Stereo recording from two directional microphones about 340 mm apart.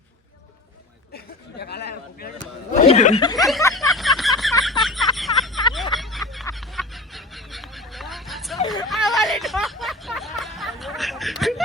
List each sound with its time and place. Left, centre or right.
1.1 s a sound: left
2.8 s speech: centre
3.4 s a sound: centre
5.7 s fowl: centre
8.6 s hubbub: centre
8.9 s hubbub: centre